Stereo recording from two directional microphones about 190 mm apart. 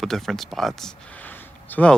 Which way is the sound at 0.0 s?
Centre (ahead or behind).